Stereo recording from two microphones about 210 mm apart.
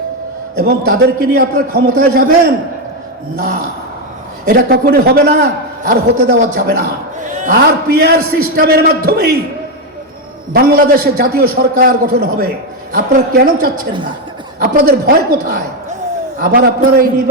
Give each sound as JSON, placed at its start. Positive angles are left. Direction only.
{"t": 0.5, "sound": "a man's voice", "side_deg": -45}
{"t": 3.3, "sound": "a man's voice", "side_deg": -45}
{"t": 10.5, "sound": "a man's voice", "side_deg": -45}